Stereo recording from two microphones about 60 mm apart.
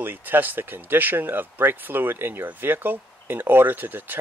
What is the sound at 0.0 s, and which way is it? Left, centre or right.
Speech, right.